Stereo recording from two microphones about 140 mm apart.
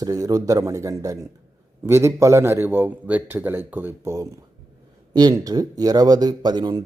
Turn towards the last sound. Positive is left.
turn(degrees=-30)  # may be behind; listen again after turning